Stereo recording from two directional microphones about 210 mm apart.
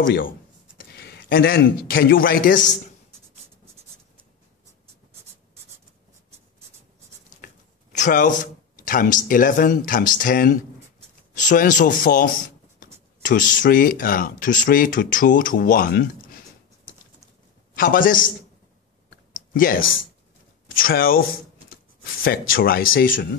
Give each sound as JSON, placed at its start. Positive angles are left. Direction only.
{"t": 0.0, "sound": "speech", "side_deg": 60}
{"t": 7.4, "sound": "speech", "side_deg": 35}
{"t": 17.7, "sound": "speech", "side_deg": 40}
{"t": 19.3, "sound": "clicking", "side_deg": 40}
{"t": 20.6, "sound": "speech", "side_deg": 45}